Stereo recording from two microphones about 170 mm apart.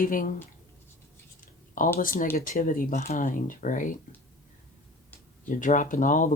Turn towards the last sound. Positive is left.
turn(degrees=50)  # may be behind; listen again after turning